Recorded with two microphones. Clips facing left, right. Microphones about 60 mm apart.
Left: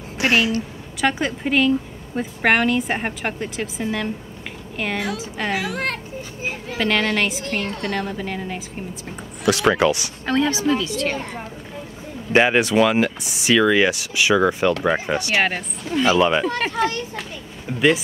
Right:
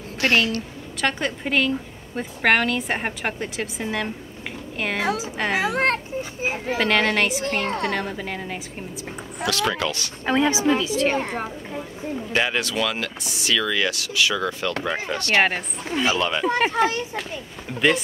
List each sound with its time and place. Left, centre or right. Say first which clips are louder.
0.2 s a woman's voice: left 2 dB; centre
5.5 s a child's voice: right 4 dB; right
6.8 s a woman's voice: left 1 dB; centre
7.6 s a woman's voice: right 3 dB; right
7.9 s a woman's voice: left 2 dB; centre
9.5 s speech: left 7 dB; left
10.2 s a woman's voice: even; centre
12.3 s speech: left 8 dB; left
15.9 s a woman's voice: left 4 dB; centre
16.2 s speech: left 6 dB; centre
16.4 s a woman's voice: right 1 dB; centre
17.7 s a woman's voice: left 2 dB; centre